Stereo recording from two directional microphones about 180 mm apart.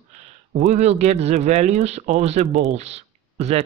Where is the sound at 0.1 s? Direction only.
40° right (ahead or behind).